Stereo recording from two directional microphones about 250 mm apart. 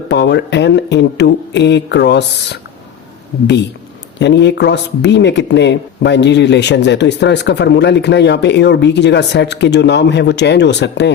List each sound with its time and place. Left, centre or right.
0.1 s speech: left